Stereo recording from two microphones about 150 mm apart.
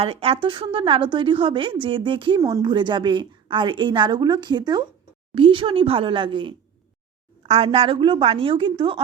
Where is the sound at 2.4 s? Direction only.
20° right (ahead or behind).